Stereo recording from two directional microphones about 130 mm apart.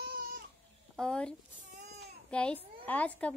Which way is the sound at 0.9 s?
5° left (ahead or behind).